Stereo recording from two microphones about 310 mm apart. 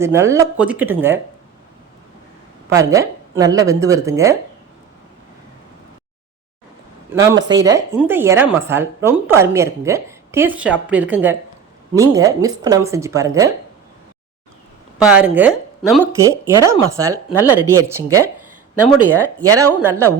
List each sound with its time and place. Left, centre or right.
0.0 s speech: centre
2.7 s speech: centre
7.4 s speech: centre
14.9 s speech: centre
18.9 s speech: right
19.5 s speech: centre